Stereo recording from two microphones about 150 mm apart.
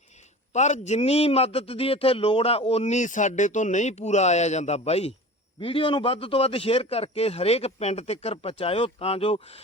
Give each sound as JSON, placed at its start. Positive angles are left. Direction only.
{"t": 0.5, "sound": "a man's voice", "side_deg": 50}